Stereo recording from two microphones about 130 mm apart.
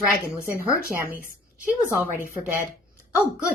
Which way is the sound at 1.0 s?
15° left (ahead or behind).